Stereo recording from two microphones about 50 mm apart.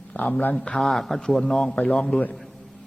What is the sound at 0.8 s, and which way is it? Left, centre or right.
Speech, centre.